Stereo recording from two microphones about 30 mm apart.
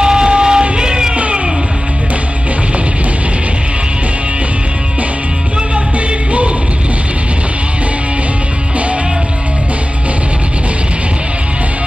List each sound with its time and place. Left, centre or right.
0.0 s music: right
1.1 s cat: right